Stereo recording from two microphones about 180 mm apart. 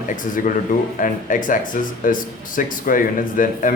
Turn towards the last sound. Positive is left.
turn(degrees=50)  # may be behind; listen again after turning